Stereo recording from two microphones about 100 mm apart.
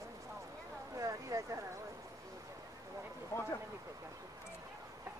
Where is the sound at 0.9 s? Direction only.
35° right (ahead or behind).